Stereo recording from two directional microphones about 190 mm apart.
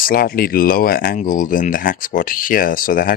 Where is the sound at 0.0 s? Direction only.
50° left (ahead or behind).